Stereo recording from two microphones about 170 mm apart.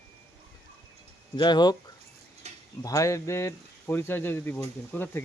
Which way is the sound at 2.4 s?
40° right (ahead or behind).